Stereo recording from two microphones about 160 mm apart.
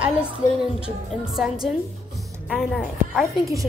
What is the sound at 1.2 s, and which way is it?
A woman's voice, 5° right (ahead or behind).